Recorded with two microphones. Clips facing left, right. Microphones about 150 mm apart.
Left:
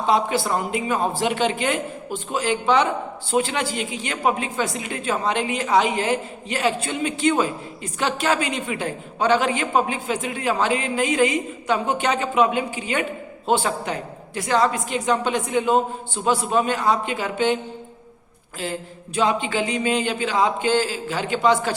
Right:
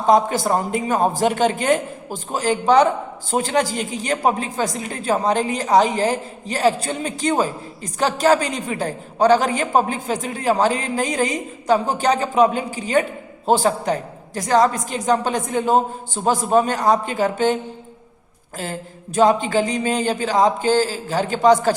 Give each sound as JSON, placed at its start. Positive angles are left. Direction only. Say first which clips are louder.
{"t": 0.0, "sound": "a man's voice", "louder": "right 4 dB", "side_deg": -45}
{"t": 18.6, "sound": "a woman's voice", "louder": "even", "side_deg": -45}